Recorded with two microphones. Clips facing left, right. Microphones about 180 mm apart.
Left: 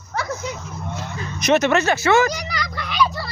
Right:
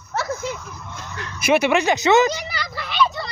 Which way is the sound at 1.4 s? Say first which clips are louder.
Even; 10° right (ahead or behind).